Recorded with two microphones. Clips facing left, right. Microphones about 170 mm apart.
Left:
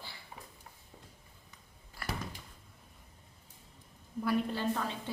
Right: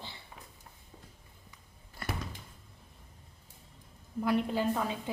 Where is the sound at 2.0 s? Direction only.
25° right (ahead or behind).